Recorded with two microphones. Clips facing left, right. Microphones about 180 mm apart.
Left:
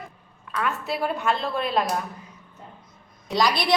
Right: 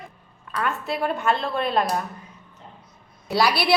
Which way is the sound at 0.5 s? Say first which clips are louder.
Right 1 dB; centre (ahead or behind).